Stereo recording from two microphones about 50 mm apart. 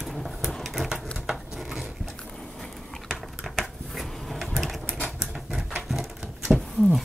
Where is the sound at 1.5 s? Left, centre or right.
Centre.